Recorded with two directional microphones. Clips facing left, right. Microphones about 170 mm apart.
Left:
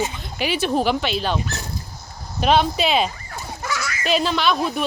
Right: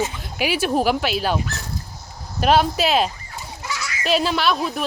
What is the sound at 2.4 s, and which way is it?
Speech, 5° right (ahead or behind).